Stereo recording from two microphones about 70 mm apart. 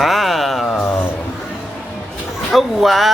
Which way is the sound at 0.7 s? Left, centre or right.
Left.